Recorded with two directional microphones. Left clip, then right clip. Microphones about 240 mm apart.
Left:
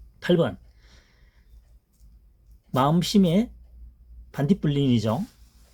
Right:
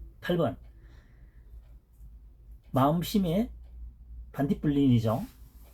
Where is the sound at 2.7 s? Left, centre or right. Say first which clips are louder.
Left 4 dB; left.